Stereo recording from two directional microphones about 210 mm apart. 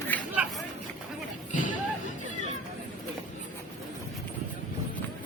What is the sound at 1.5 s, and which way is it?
Music, 40° left (ahead or behind).